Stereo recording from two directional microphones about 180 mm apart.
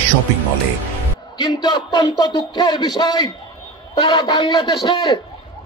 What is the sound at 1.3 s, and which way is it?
Speech, 25° left (ahead or behind).